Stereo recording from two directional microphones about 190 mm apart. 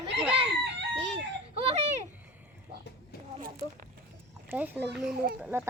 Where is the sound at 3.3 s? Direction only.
50° right (ahead or behind).